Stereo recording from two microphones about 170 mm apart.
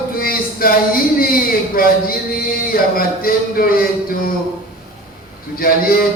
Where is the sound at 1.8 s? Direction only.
60° left (ahead or behind).